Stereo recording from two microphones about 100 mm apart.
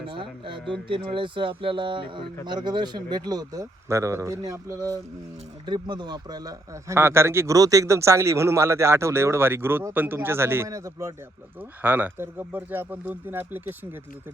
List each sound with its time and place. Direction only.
0.1 s speech: 60° right (ahead or behind); by 4.9 s 35° right (ahead or behind)
5.6 s speech: 50° right (ahead or behind)
6.8 s speech: 25° right (ahead or behind)
11.8 s speech: 20° right (ahead or behind)